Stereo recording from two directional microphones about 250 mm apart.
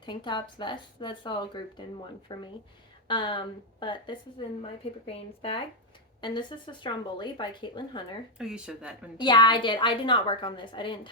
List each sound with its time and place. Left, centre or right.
0.0 s speech: centre
8.4 s speech: centre
9.2 s speech: centre